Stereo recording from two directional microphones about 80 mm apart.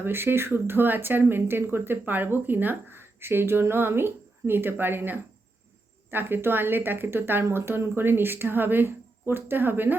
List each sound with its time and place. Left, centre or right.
0.0 s speech: right